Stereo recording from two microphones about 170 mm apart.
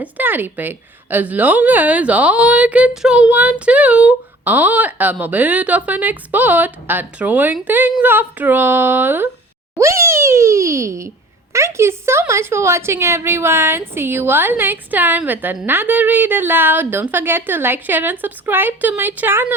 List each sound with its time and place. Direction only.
0.0 s a woman's voice: 10° right (ahead or behind)
9.7 s a sound: 15° right (ahead or behind)
11.5 s a woman's voice: 15° right (ahead or behind)